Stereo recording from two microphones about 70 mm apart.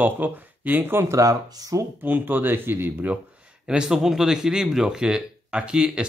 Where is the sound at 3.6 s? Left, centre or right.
Centre.